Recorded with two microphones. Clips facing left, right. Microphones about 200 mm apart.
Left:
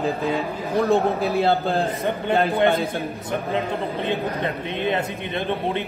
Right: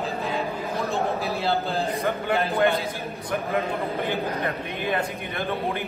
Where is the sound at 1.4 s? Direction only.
55° left (ahead or behind).